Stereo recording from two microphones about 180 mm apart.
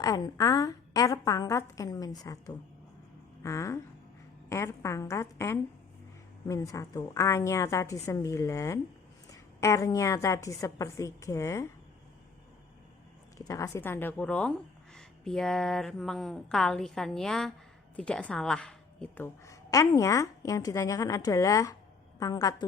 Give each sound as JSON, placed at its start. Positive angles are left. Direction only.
{"t": 0.0, "sound": "a woman's voice", "side_deg": 20}
{"t": 13.5, "sound": "a woman's voice", "side_deg": 15}